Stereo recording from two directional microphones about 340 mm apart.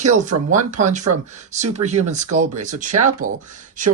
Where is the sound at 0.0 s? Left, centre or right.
Right.